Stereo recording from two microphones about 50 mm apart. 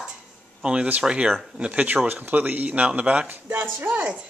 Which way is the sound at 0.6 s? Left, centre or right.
Right.